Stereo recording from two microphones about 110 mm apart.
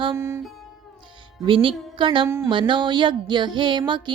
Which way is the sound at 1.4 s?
50° right (ahead or behind).